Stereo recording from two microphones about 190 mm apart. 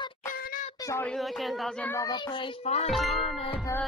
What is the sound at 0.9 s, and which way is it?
Speech, 10° left (ahead or behind).